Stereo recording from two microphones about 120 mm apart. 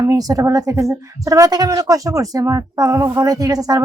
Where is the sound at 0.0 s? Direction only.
30° right (ahead or behind).